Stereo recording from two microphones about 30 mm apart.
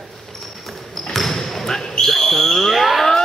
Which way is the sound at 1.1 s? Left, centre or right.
Centre.